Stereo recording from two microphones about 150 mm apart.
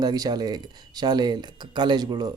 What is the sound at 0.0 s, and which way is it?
Speech, 25° right (ahead or behind).